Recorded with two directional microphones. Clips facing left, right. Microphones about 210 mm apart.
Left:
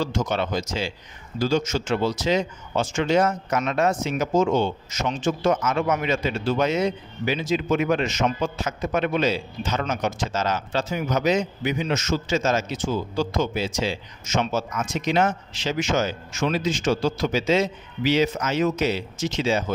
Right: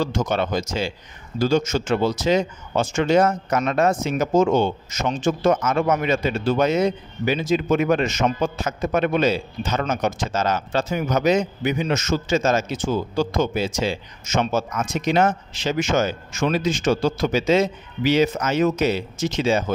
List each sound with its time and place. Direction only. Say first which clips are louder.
0.0 s speech: right 2 dB; 50° right (ahead or behind)